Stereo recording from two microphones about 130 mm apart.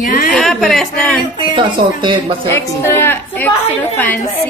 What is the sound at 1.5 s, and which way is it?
Speech, 35° right (ahead or behind).